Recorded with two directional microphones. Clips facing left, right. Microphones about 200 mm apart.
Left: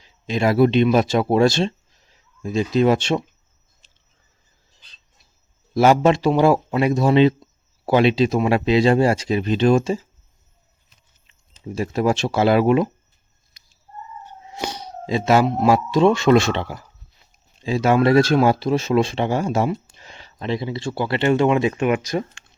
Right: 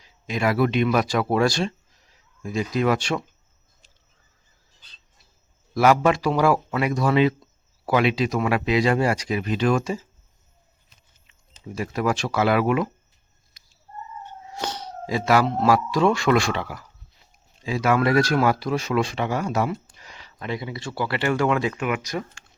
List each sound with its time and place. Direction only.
0.0 s speech: 30° left (ahead or behind)
3.8 s a sound: 25° left (ahead or behind)
5.7 s speech: 25° left (ahead or behind)
11.3 s speech: 25° left (ahead or behind)
14.5 s a sound: 10° left (ahead or behind)
15.0 s speech: 25° left (ahead or behind)